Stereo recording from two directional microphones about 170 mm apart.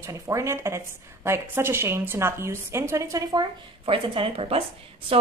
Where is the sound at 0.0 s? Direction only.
20° right (ahead or behind).